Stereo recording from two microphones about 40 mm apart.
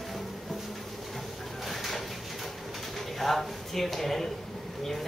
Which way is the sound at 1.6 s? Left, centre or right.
Centre.